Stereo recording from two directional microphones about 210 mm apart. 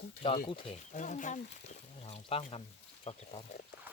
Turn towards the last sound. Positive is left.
turn(degrees=25)  # may be behind; listen again after turning